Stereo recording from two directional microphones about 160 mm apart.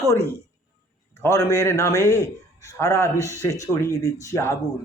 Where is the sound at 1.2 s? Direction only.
20° left (ahead or behind).